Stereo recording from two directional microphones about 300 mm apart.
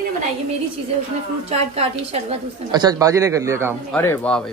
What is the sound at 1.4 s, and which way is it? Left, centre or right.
A woman's voice, right.